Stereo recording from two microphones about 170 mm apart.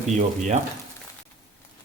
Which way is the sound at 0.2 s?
45° right (ahead or behind).